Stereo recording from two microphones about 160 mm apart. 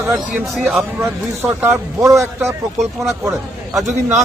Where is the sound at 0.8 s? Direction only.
15° right (ahead or behind).